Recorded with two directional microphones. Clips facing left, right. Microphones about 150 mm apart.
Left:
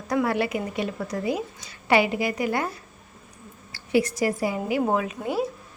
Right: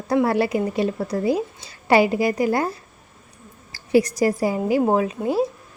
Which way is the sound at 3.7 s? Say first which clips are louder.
Right 5 dB; 40° right (ahead or behind).